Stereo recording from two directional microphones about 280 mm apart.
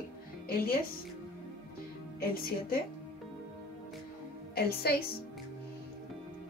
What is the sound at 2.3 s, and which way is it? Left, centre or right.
Speech, left.